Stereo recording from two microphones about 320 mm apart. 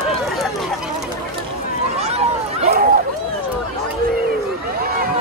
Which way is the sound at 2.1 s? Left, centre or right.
Centre.